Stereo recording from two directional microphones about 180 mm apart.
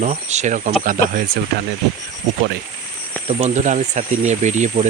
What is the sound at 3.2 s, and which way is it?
Speech, 40° right (ahead or behind).